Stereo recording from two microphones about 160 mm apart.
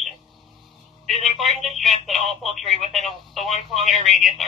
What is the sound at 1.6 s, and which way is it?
Speech, centre (ahead or behind).